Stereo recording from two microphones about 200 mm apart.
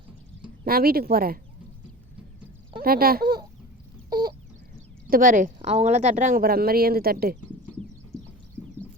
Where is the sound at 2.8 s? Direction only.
50° right (ahead or behind).